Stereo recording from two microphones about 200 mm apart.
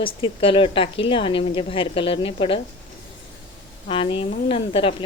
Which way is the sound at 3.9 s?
25° left (ahead or behind).